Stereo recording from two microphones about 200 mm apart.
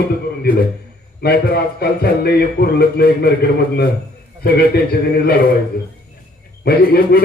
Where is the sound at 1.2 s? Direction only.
50° left (ahead or behind).